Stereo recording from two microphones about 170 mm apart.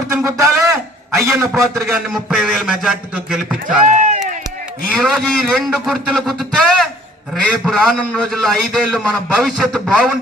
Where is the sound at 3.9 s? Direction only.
50° right (ahead or behind).